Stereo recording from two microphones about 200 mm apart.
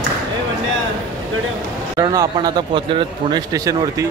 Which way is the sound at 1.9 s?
20° right (ahead or behind).